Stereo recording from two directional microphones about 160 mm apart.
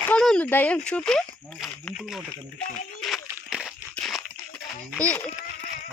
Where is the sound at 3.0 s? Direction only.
Centre (ahead or behind).